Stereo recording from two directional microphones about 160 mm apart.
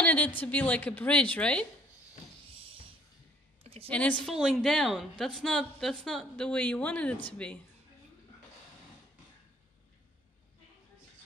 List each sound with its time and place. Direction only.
0.0 s a woman's voice: 10° left (ahead or behind)
2.5 s music: 35° right (ahead or behind)
3.6 s a sound: 40° right (ahead or behind)
3.9 s a woman's voice: 10° left (ahead or behind)